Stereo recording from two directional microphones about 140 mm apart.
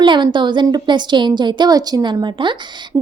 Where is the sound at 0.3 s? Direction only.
35° right (ahead or behind).